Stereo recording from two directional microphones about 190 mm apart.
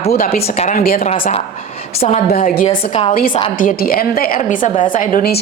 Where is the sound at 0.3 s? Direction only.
30° left (ahead or behind).